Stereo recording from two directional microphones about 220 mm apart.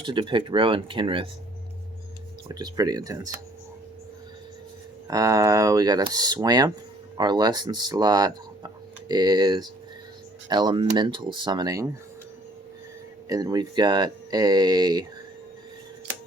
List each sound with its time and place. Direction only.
0.0 s speech: 20° right (ahead or behind)
2.5 s speech: 15° right (ahead or behind)
5.0 s speech: 15° right (ahead or behind)
13.2 s speech: 15° right (ahead or behind)